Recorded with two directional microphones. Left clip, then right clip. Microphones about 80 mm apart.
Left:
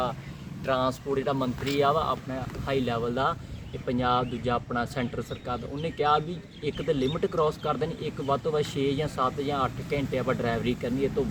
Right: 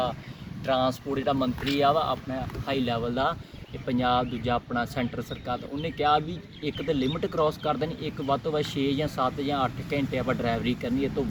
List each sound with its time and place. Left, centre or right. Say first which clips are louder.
0.6 s speech: right 1 dB; left
2.6 s speech: left 1 dB; centre